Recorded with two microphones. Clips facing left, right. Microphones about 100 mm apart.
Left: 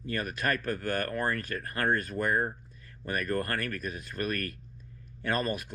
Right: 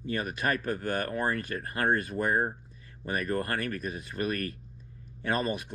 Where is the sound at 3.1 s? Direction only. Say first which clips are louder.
Right 1 dB; 25° right (ahead or behind).